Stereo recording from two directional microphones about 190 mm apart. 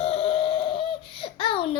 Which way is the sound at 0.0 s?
30° left (ahead or behind).